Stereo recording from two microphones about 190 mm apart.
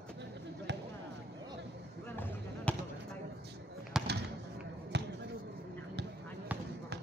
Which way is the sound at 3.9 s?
5° right (ahead or behind).